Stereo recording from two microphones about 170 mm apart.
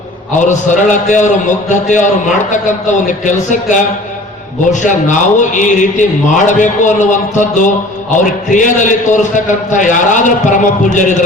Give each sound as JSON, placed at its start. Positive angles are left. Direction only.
{"t": 0.3, "sound": "a man's voice", "side_deg": 45}